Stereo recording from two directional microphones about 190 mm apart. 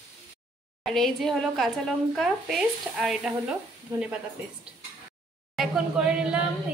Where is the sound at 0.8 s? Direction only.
Centre (ahead or behind).